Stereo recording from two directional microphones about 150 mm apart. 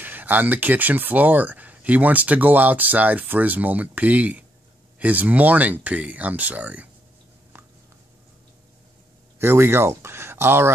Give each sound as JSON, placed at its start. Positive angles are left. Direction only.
{"t": 0.0, "sound": "speech", "side_deg": -10}
{"t": 9.4, "sound": "speech", "side_deg": -15}